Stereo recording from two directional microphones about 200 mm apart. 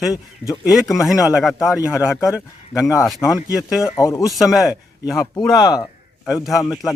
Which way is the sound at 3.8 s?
15° left (ahead or behind).